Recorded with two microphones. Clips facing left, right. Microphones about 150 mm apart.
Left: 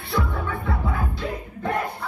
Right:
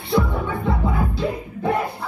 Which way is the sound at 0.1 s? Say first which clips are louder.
Right 6 dB; 15° right (ahead or behind).